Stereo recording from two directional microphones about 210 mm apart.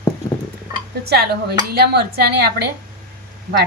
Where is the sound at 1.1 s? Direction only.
50° right (ahead or behind).